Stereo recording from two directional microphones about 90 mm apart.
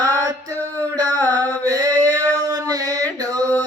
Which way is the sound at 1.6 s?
40° right (ahead or behind).